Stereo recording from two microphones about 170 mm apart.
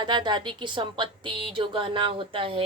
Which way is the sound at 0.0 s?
25° right (ahead or behind).